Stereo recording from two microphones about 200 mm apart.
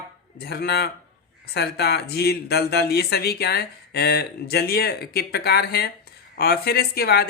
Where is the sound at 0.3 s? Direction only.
55° left (ahead or behind).